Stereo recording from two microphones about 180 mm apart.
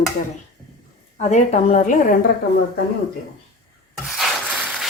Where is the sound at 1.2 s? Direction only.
40° left (ahead or behind).